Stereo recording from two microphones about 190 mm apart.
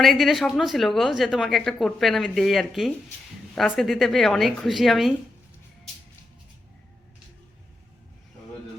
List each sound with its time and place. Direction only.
0.0 s a woman's voice: centre (ahead or behind)